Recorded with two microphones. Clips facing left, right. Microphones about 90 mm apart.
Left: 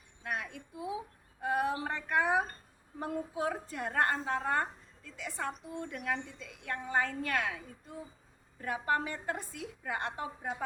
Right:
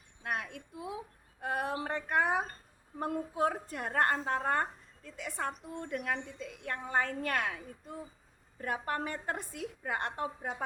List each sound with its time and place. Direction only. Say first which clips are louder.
0.2 s a woman's voice: right 1 dB; 55° right (ahead or behind)
1.4 s a sound: left 2 dB; 55° right (ahead or behind)
3.0 s a woman's voice: right 3 dB; 50° right (ahead or behind)
8.6 s a woman's voice: left 2 dB; 50° right (ahead or behind)